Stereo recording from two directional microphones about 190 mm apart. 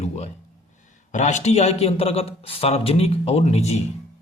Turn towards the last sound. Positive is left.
turn(degrees=35)  # may be behind; listen again after turning